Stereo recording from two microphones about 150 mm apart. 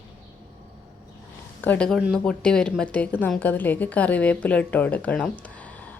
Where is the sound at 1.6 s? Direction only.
10° left (ahead or behind).